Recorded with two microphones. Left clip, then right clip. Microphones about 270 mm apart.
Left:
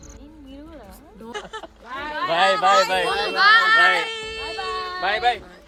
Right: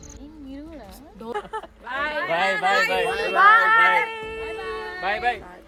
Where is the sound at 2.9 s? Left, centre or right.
Left.